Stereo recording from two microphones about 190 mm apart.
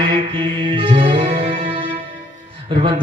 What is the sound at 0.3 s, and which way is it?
Music, 25° right (ahead or behind).